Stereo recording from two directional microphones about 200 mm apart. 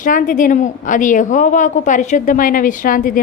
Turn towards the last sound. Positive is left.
turn(degrees=45)  # may be behind; listen again after turning